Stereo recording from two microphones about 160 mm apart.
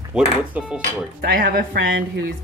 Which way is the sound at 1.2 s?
65° right (ahead or behind).